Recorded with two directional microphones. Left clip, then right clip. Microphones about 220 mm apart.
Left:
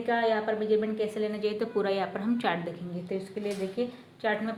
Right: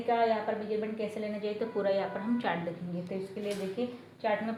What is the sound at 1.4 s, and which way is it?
A woman's voice, 40° left (ahead or behind).